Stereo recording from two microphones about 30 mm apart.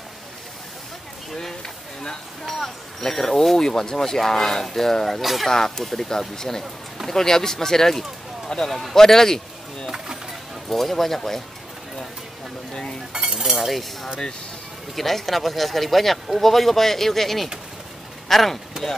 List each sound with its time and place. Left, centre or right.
2.4 s speech: centre
5.2 s speech: centre
5.5 s speech: centre
8.5 s speech: left
8.9 s speech: centre
9.8 s vehicle: centre
10.7 s speech: centre
13.2 s chink: centre
13.6 s cutlery: centre
15.0 s speech: centre